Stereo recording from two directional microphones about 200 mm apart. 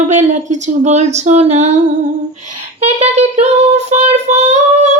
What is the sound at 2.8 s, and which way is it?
A woman's voice, 35° right (ahead or behind).